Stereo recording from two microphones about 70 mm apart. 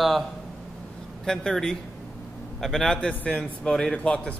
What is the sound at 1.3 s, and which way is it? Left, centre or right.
Speech, centre.